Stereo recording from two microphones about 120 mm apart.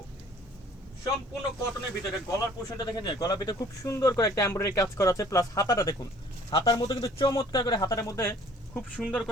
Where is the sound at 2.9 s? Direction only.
35° left (ahead or behind).